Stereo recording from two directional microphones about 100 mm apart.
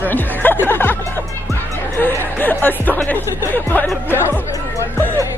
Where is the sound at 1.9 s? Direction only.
20° left (ahead or behind).